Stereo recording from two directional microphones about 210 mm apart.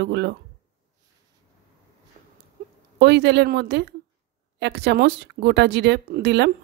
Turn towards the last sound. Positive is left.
turn(degrees=-55)  # may be behind; listen again after turning